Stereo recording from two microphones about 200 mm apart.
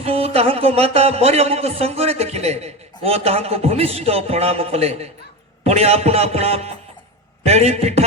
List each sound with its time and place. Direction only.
0.0 s a man's voice: 30° right (ahead or behind)